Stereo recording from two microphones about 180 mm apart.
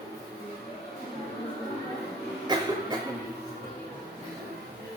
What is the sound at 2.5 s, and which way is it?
Cough, 25° right (ahead or behind).